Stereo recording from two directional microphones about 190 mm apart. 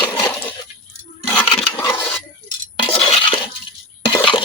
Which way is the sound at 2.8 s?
30° left (ahead or behind).